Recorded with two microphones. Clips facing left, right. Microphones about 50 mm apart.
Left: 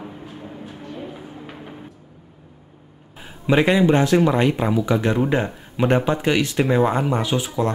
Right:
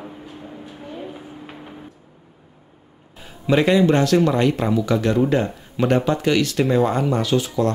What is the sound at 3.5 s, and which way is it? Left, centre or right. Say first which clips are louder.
Speech: even; centre.